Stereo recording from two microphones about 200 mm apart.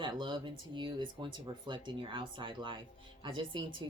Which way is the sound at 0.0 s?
25° right (ahead or behind).